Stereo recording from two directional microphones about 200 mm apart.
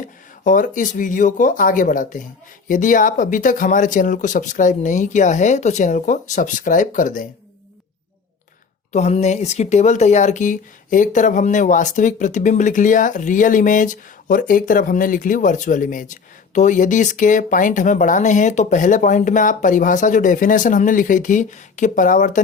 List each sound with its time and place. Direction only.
0.0 s speech: 40° left (ahead or behind)
8.9 s speech: 35° left (ahead or behind)